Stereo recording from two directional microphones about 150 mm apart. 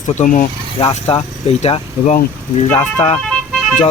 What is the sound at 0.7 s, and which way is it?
Speech, 40° left (ahead or behind).